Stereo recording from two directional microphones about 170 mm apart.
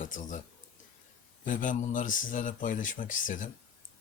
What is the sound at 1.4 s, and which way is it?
Speech, 50° left (ahead or behind).